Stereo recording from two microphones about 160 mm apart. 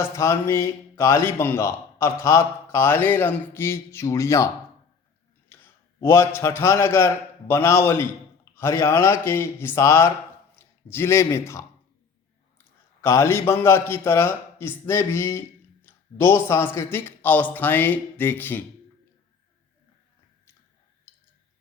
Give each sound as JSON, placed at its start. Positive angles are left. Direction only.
{"t": 0.2, "sound": "a man's voice", "side_deg": 15}
{"t": 5.5, "sound": "a man's voice", "side_deg": 15}
{"t": 13.0, "sound": "a man's voice", "side_deg": 15}
{"t": 21.1, "sound": "a sound", "side_deg": 15}